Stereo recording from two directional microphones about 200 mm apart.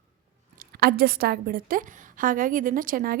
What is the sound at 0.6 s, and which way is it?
A woman's voice, 50° right (ahead or behind).